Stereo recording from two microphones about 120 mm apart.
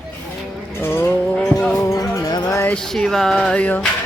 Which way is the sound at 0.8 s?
20° left (ahead or behind).